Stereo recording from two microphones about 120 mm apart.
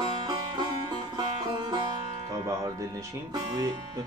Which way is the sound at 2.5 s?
30° right (ahead or behind).